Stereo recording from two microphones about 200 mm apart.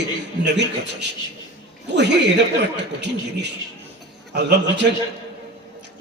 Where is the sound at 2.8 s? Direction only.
60° right (ahead or behind).